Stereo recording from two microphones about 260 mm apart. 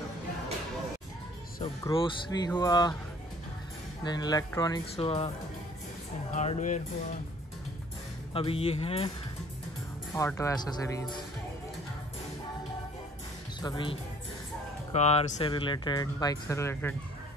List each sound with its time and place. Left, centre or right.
1.6 s speech: centre
4.0 s speech: centre
6.3 s speech: left
8.3 s speech: left
10.1 s speech: centre
13.6 s speech: centre